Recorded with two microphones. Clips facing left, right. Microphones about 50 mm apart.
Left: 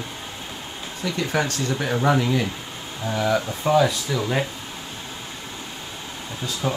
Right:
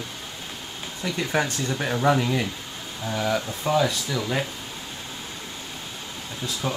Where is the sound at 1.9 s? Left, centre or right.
Centre.